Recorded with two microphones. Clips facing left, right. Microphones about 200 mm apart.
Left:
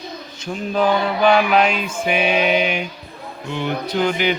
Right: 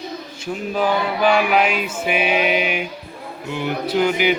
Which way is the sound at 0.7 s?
10° right (ahead or behind).